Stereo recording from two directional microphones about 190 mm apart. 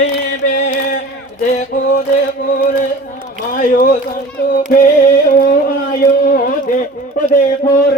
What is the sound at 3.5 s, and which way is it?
Music, 45° left (ahead or behind).